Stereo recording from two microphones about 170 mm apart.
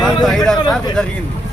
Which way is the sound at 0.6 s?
25° left (ahead or behind).